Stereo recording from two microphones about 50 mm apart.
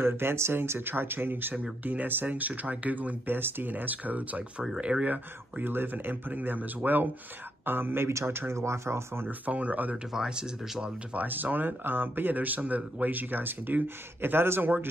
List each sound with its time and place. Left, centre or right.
0.0 s speech: right
5.1 s speech: right
8.1 s speech: right
9.5 s speech: right
10.1 s speech: centre
11.1 s speech: right